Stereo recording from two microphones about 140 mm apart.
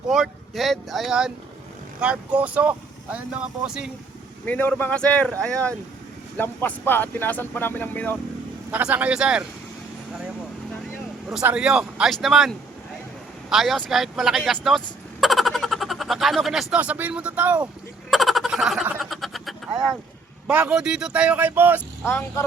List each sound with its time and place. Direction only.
0.1 s speech: centre (ahead or behind)
4.4 s speech: 10° left (ahead or behind)
8.7 s speech: 10° right (ahead or behind)
11.4 s speech: 5° right (ahead or behind)
18.1 s fowl: centre (ahead or behind)
20.5 s speech: 10° right (ahead or behind)
22.0 s speech: 20° left (ahead or behind)